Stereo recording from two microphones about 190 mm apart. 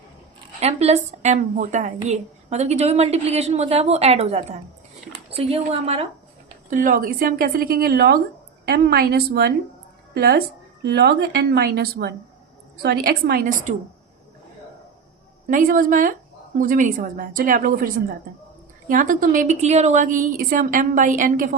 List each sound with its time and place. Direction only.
0.6 s a woman's voice: 35° right (ahead or behind)
6.7 s a woman's voice: 45° right (ahead or behind)
15.4 s a woman's voice: 45° right (ahead or behind)